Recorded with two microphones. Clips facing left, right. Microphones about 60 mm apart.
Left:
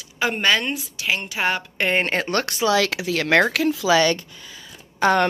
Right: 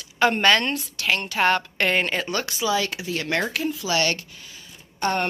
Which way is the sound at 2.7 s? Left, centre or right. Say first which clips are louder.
Left 4 dB; left.